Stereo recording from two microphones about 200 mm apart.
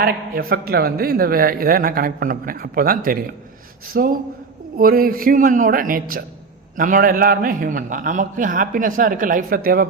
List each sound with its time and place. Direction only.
0.0 s a man's voice: 50° right (ahead or behind)